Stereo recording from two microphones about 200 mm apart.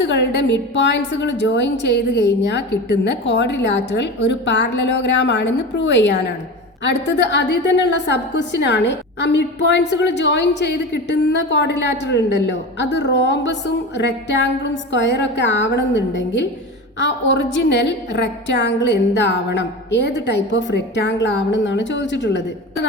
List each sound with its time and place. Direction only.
0.0 s a woman's voice: 60° left (ahead or behind)